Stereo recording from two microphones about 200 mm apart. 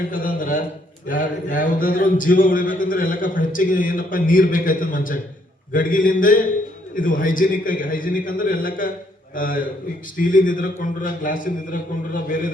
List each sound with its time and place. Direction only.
0.1 s a man's voice: 40° left (ahead or behind)